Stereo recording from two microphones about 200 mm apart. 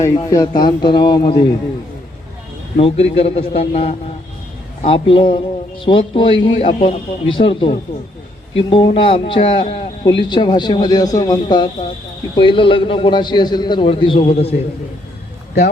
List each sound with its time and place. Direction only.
0.0 s a man's voice: 15° left (ahead or behind)
2.7 s a man's voice: 30° left (ahead or behind)